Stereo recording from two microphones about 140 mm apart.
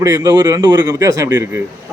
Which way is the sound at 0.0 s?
25° right (ahead or behind).